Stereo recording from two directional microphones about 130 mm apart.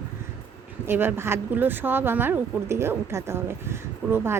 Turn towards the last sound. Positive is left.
turn(degrees=-20)  # may be behind; listen again after turning